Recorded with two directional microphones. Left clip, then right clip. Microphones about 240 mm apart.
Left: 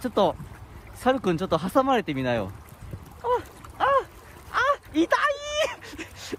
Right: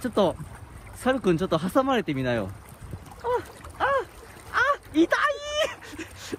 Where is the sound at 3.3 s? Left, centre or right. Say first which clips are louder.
Left 2 dB; left.